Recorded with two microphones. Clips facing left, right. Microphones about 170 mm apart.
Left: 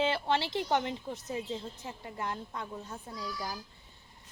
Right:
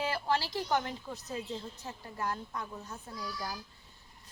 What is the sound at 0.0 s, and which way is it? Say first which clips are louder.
A woman's voice: left 3 dB; 25° left (ahead or behind).